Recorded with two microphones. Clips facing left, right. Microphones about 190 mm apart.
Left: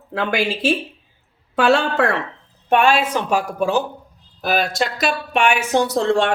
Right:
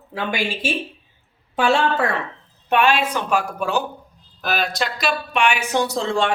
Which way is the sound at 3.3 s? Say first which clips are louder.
Left 3 dB; 40° left (ahead or behind).